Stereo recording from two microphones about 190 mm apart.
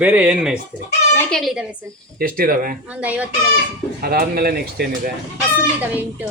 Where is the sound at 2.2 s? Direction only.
50° right (ahead or behind).